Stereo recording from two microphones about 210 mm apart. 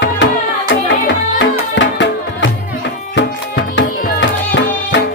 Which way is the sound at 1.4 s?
60° left (ahead or behind).